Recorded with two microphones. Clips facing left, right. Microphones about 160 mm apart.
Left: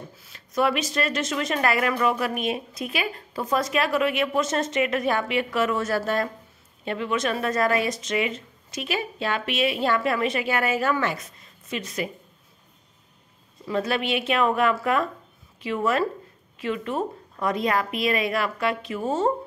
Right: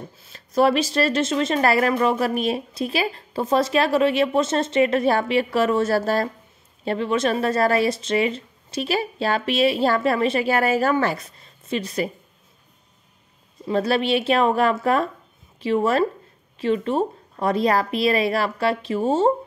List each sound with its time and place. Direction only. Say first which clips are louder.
0.2 s speech: right 5 dB; 30° right (ahead or behind)
13.7 s speech: right 5 dB; 35° right (ahead or behind)